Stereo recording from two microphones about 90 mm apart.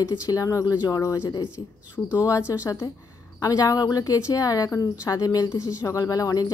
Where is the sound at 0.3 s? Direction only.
40° left (ahead or behind).